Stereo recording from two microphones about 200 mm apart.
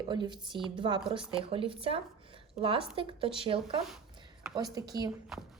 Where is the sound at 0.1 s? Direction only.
20° right (ahead or behind).